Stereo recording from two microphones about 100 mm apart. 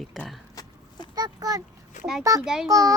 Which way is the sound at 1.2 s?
35° right (ahead or behind).